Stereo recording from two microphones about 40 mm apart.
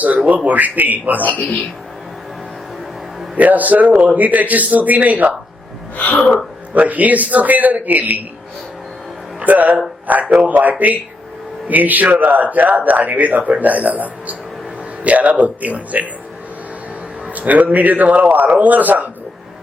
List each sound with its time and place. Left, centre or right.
0.3 s a man's voice: right
3.3 s a man's voice: right
6.0 s speech: left
6.7 s a man's voice: right
9.4 s a man's voice: right
17.3 s a man's voice: right